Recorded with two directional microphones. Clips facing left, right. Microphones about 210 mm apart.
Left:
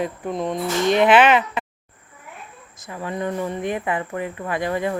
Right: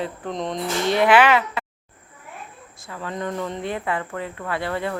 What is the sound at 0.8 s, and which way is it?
Speech, 20° left (ahead or behind).